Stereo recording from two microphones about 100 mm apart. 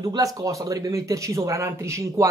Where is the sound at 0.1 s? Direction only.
35° right (ahead or behind).